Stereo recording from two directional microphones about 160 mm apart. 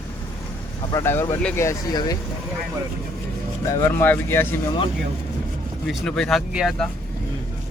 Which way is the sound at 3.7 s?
15° left (ahead or behind).